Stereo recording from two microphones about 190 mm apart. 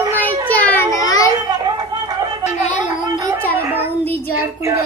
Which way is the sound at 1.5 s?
20° right (ahead or behind).